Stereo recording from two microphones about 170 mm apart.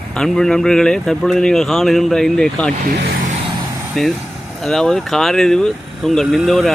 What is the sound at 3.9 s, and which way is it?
Speech, centre (ahead or behind).